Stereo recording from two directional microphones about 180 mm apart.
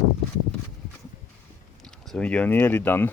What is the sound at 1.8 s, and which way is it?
Speech, 5° left (ahead or behind).